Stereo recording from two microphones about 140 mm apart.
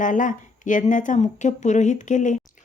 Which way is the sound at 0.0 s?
65° left (ahead or behind).